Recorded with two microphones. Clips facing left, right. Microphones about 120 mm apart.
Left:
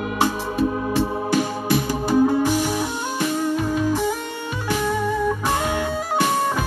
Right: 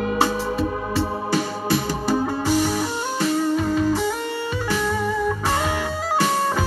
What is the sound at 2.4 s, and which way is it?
Music, 15° left (ahead or behind).